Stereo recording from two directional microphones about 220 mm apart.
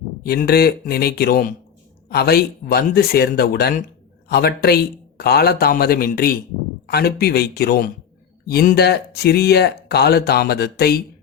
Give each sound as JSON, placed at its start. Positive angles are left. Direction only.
{"t": 0.2, "sound": "speech", "side_deg": 40}